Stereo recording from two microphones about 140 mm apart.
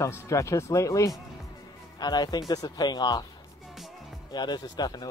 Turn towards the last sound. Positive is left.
turn(degrees=25)  # may be behind; listen again after turning